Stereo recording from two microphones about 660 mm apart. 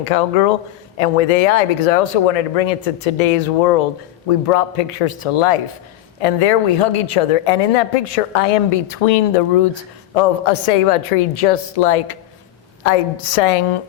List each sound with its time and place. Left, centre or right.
0.0 s speech: left
4.4 s a man's voice: left
10.2 s a woman's voice: left